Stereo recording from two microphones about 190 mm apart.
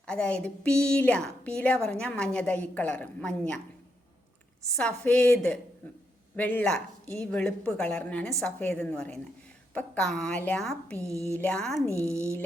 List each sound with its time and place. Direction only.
0.0 s a woman's voice: 5° left (ahead or behind)
4.8 s a woman's voice: 5° left (ahead or behind)
11.1 s speech: 15° right (ahead or behind)
11.3 s speech: 5° left (ahead or behind)